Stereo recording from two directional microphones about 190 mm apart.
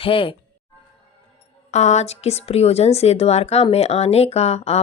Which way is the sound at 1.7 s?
35° left (ahead or behind).